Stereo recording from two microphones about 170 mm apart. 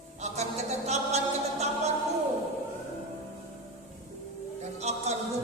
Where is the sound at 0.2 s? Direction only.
40° right (ahead or behind).